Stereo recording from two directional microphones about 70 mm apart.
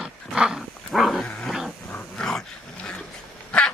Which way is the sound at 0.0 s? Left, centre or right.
Centre.